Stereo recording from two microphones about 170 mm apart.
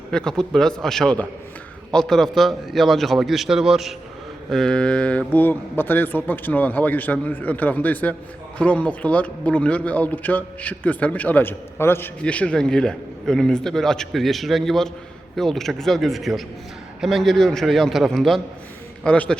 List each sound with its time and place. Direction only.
0.1 s a man's voice: 5° left (ahead or behind)